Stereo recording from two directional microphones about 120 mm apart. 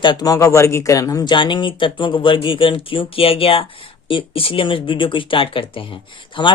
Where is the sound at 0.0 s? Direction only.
35° left (ahead or behind).